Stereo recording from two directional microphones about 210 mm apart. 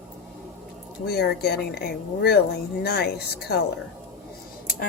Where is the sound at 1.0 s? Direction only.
50° left (ahead or behind).